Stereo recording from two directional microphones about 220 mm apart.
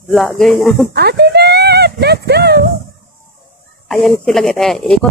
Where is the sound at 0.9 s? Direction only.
45° right (ahead or behind).